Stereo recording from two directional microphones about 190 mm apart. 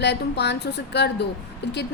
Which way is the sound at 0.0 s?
65° left (ahead or behind).